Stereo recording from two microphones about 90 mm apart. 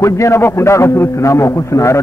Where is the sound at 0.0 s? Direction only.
35° left (ahead or behind).